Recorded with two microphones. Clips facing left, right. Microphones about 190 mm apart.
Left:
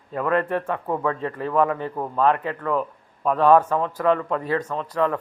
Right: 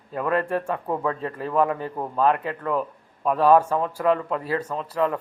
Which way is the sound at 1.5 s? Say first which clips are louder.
Left 1 dB; 15° right (ahead or behind).